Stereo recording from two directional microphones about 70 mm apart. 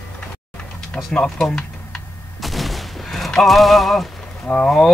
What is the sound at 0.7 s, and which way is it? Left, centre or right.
Speech, centre.